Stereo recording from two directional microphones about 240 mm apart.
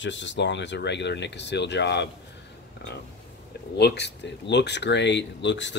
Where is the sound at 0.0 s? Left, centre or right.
Left.